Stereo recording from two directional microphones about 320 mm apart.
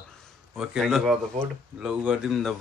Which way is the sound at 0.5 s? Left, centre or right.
Centre.